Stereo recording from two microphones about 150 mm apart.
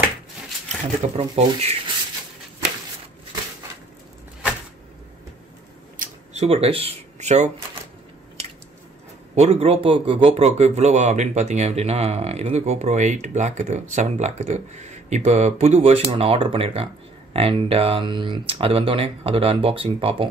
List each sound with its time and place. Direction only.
1.1 s a man's voice: 45° right (ahead or behind)
6.3 s speech: 45° right (ahead or behind)
9.3 s a man's voice: 45° right (ahead or behind)